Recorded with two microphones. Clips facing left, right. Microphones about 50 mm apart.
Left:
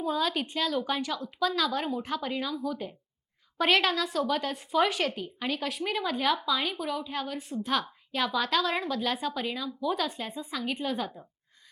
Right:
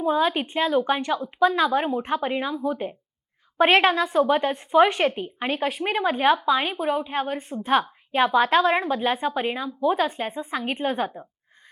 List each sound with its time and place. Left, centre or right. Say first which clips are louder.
0.0 s a woman's voice: right 7 dB; right